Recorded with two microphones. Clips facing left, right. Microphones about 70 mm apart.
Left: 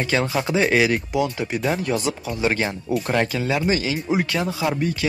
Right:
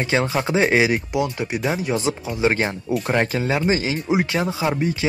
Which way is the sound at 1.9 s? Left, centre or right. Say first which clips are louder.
Right 1 dB; right.